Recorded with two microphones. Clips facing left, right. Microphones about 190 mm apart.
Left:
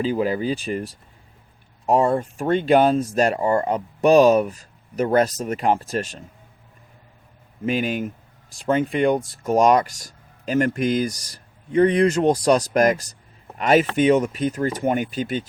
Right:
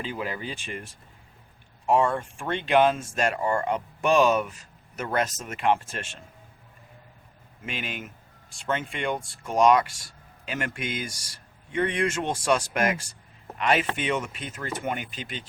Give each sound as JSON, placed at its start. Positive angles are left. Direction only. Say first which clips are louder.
{"t": 0.0, "sound": "speech", "louder": "left 11 dB", "side_deg": 40}
{"t": 7.6, "sound": "speech", "louder": "left 12 dB", "side_deg": 40}